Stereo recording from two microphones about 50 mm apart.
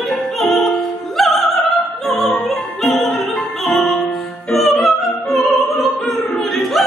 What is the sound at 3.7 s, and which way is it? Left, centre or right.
Music, centre.